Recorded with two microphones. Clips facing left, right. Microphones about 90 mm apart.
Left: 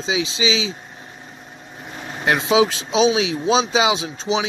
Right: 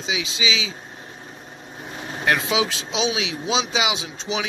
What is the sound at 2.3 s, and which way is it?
Speech, 25° left (ahead or behind).